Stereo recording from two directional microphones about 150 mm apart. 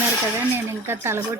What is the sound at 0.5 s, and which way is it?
Speech, 15° right (ahead or behind).